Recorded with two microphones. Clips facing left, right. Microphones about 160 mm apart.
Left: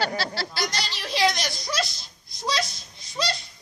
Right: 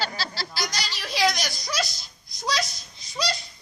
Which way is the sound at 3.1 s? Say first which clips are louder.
Even; centre (ahead or behind).